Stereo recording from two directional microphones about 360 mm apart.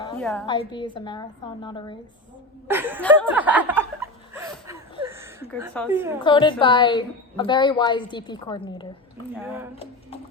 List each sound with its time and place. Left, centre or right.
0.0 s a woman's voice: centre
2.6 s chuckle: centre
5.7 s a woman's voice: centre
6.2 s a woman's voice: centre
9.4 s speech: centre